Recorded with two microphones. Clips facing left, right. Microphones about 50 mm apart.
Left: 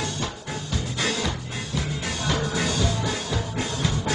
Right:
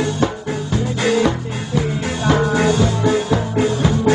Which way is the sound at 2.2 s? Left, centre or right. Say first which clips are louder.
Right 11 dB; right.